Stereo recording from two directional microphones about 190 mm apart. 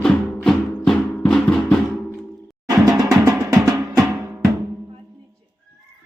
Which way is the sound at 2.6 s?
20° right (ahead or behind).